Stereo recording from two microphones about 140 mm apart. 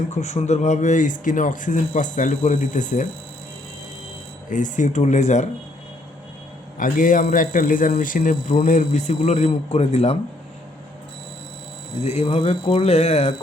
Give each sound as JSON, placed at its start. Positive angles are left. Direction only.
{"t": 0.1, "sound": "speech", "side_deg": 55}
{"t": 4.4, "sound": "speech", "side_deg": 65}
{"t": 6.7, "sound": "a man's voice", "side_deg": 75}
{"t": 12.0, "sound": "speech", "side_deg": 45}